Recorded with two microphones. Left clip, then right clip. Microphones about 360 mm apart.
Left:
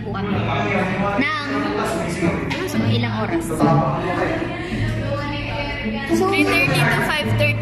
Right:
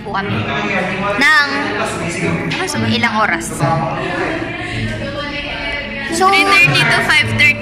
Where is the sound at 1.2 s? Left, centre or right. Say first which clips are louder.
Right 12 dB; centre.